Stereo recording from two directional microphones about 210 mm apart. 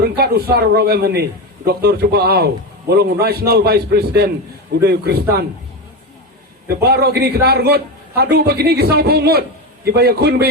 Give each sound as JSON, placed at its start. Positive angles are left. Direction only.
{"t": 0.0, "sound": "a man's voice", "side_deg": -50}
{"t": 6.7, "sound": "a man's voice", "side_deg": -50}